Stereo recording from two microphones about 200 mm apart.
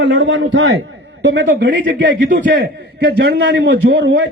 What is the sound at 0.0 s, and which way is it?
A man's voice, 60° right (ahead or behind).